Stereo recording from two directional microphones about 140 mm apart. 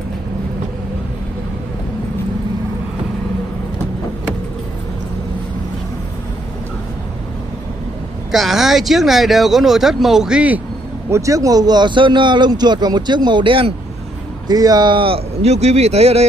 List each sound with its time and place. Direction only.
8.3 s speech: centre (ahead or behind)
11.1 s a man's voice: 20° right (ahead or behind); by 13.7 s 40° right (ahead or behind)
14.5 s speech: 30° right (ahead or behind); by 16.3 s 50° right (ahead or behind)